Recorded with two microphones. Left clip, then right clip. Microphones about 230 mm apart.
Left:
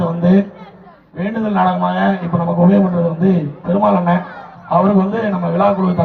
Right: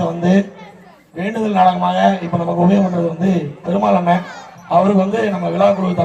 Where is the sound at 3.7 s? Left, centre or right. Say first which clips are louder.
Even; right.